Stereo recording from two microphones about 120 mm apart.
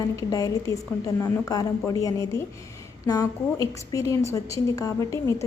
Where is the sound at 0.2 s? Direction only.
30° left (ahead or behind).